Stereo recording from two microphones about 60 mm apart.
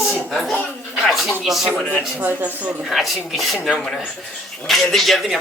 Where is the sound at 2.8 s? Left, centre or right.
Centre.